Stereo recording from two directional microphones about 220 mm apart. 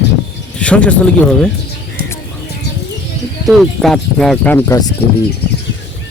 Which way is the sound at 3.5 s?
Centre (ahead or behind).